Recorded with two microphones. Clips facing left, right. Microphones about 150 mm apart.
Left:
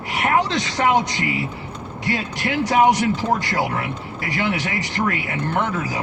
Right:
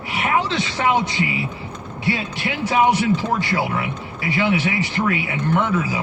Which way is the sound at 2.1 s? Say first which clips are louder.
Left 1 dB; 50° left (ahead or behind).